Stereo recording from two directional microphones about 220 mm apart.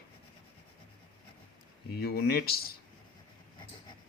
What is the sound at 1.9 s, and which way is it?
Speech, 45° left (ahead or behind).